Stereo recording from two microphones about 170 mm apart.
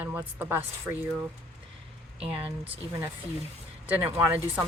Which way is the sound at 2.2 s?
35° right (ahead or behind).